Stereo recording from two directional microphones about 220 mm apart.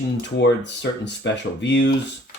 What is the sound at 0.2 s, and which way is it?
Speech, 55° left (ahead or behind).